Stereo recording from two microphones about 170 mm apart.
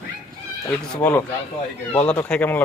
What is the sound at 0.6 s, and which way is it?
Speech, 10° left (ahead or behind).